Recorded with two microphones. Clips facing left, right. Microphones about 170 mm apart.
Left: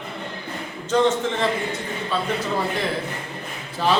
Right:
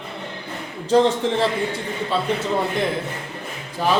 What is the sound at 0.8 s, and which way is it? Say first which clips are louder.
A man's voice: right 3 dB; 35° right (ahead or behind).